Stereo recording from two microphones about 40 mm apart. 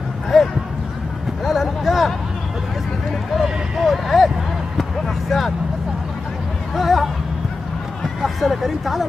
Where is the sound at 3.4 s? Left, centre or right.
Centre.